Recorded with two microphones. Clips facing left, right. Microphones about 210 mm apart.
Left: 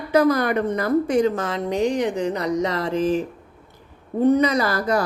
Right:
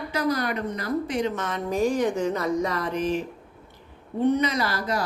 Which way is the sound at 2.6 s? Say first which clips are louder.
Left 3 dB; 90° left.